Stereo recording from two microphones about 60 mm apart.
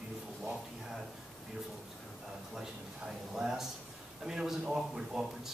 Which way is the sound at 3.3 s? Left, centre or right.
Centre.